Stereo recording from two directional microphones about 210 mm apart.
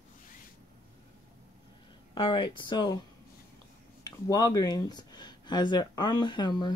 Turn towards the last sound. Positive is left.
turn(degrees=20)  # may be behind; listen again after turning